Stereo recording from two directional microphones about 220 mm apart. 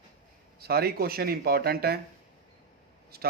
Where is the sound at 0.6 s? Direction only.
45° right (ahead or behind).